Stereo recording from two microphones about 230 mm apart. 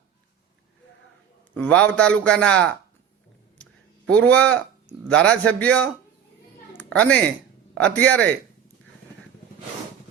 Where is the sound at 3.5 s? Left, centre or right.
Centre.